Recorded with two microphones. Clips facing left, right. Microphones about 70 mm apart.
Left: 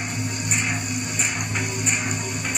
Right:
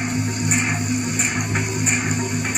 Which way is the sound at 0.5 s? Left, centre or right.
Right.